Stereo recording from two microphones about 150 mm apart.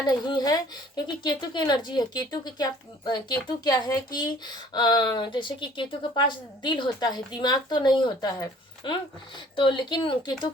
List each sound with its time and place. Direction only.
0.0 s speech: 30° left (ahead or behind)